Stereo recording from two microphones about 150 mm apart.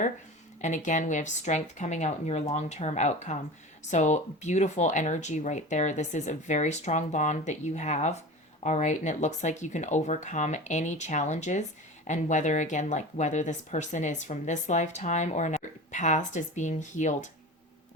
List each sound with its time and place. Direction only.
0.6 s speech: 55° left (ahead or behind)